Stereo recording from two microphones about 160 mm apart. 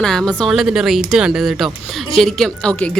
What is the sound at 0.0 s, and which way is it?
A woman's voice, 5° left (ahead or behind).